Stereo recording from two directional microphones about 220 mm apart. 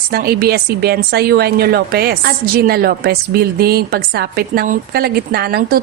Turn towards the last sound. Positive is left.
turn(degrees=-45)  # may be behind; listen again after turning